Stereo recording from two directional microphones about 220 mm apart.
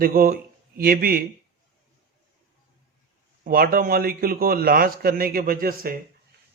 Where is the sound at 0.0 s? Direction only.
40° right (ahead or behind).